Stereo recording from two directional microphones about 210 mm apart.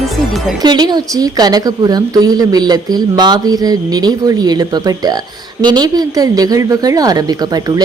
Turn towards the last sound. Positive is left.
turn(degrees=-20)  # may be behind; listen again after turning